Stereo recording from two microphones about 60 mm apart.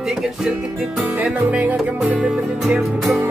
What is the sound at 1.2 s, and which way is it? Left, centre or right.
Music, right.